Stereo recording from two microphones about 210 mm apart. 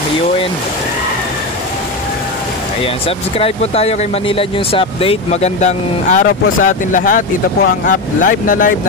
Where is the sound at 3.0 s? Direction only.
25° left (ahead or behind).